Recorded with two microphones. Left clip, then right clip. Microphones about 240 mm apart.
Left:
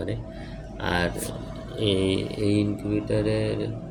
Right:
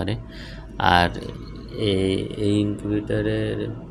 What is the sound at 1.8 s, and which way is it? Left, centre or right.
Mantra, centre.